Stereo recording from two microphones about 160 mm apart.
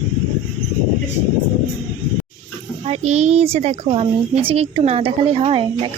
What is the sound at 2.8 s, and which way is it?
A child's voice, 45° right (ahead or behind).